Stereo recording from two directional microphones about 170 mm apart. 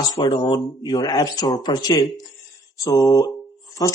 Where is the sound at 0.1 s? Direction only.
25° left (ahead or behind).